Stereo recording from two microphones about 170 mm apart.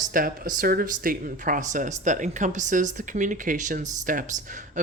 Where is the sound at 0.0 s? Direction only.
55° right (ahead or behind).